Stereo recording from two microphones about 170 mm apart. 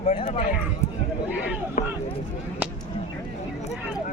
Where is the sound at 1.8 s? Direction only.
45° left (ahead or behind).